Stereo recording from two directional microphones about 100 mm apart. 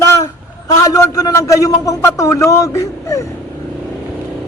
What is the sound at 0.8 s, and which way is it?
A man's voice, 35° left (ahead or behind).